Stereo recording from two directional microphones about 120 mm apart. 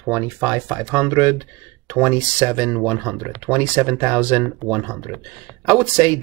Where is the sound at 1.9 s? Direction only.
20° right (ahead or behind).